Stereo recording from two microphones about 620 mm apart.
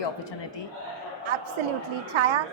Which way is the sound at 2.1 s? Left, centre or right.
Right.